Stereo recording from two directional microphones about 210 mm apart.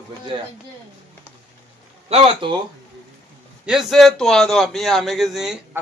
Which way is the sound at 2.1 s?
30° right (ahead or behind).